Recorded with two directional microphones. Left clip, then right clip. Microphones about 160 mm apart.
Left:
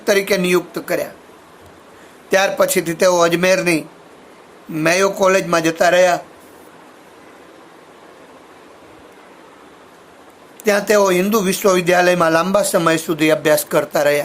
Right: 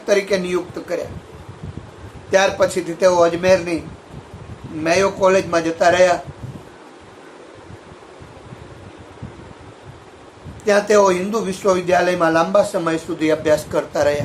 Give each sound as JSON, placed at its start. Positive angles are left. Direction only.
{"t": 0.0, "sound": "speech", "side_deg": 75}
{"t": 2.3, "sound": "speech", "side_deg": 70}
{"t": 4.8, "sound": "speech", "side_deg": 80}
{"t": 10.6, "sound": "speech", "side_deg": 70}